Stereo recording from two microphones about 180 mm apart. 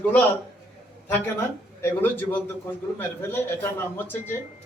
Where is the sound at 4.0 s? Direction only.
10° left (ahead or behind).